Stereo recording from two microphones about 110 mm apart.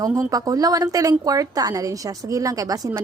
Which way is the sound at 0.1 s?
30° right (ahead or behind).